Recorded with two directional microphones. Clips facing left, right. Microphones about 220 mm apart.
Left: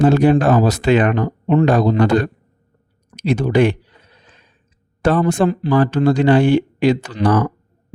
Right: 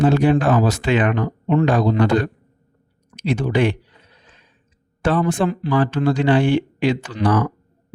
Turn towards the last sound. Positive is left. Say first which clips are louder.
# left 2 dB
turn(degrees=40)  # may be behind; listen again after turning